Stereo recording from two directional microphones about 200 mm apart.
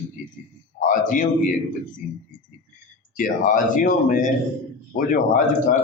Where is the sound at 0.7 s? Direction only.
40° left (ahead or behind).